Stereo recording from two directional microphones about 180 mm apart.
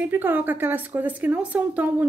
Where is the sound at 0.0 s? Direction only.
10° right (ahead or behind).